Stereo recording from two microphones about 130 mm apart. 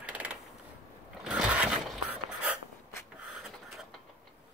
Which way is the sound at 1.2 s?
5° right (ahead or behind).